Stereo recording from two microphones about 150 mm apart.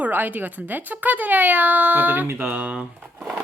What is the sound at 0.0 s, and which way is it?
Speech, 10° right (ahead or behind).